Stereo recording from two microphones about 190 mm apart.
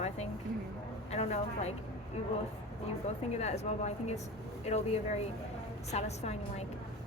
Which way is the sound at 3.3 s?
35° left (ahead or behind).